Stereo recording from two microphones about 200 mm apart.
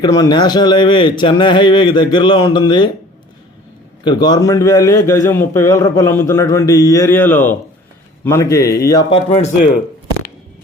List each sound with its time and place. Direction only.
0.0 s a man's voice: 20° left (ahead or behind)
4.0 s a man's voice: 20° left (ahead or behind)